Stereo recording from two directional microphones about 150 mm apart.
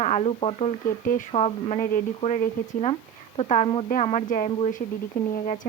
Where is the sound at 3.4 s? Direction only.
50° left (ahead or behind).